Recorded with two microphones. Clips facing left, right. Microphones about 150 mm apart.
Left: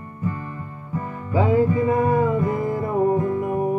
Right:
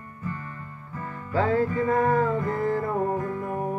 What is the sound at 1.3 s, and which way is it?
Music, 15° left (ahead or behind).